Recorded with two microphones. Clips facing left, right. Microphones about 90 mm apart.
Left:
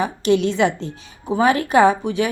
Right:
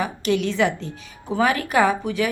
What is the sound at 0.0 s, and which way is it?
A woman's voice, 25° left (ahead or behind).